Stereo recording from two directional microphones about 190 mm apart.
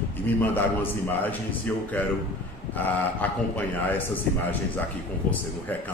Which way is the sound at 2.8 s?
10° left (ahead or behind).